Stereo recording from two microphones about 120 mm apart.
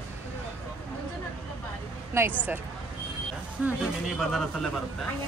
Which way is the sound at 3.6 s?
15° right (ahead or behind).